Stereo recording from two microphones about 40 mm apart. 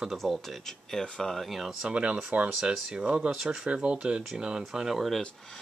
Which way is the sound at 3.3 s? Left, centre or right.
Centre.